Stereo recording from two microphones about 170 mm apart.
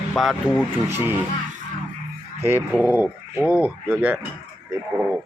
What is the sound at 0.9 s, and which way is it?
Speech, 10° right (ahead or behind).